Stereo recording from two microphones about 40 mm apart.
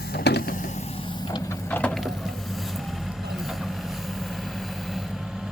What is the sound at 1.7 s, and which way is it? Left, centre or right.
Vehicle, left.